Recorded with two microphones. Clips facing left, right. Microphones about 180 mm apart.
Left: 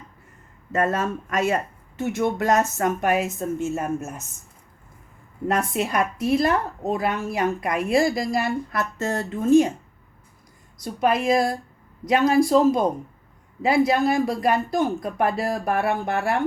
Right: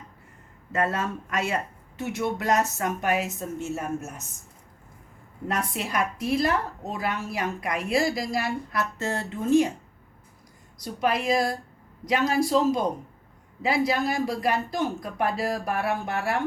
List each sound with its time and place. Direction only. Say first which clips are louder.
0.7 s a woman's voice: left 4 dB; 45° left (ahead or behind)
5.5 s a woman's voice: left 6 dB; 50° left (ahead or behind)
10.8 s a woman's voice: left 4 dB; 50° left (ahead or behind)